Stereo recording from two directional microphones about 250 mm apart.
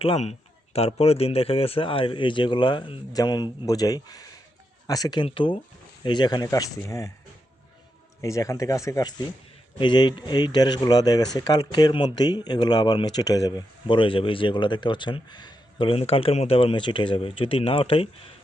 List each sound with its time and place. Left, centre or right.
0.0 s speech: left
8.2 s speech: centre